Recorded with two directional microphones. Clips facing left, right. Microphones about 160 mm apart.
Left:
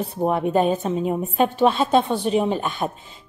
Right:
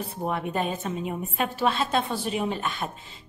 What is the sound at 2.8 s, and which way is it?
Speech, 40° left (ahead or behind).